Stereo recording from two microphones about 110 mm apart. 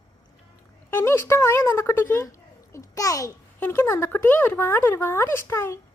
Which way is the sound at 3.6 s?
20° left (ahead or behind).